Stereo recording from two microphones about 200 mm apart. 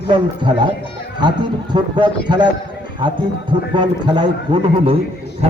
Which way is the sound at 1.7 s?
25° right (ahead or behind).